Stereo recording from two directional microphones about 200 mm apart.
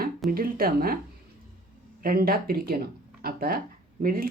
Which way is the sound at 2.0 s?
45° right (ahead or behind).